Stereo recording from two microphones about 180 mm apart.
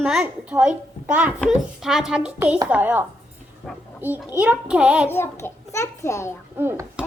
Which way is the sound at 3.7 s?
5° left (ahead or behind).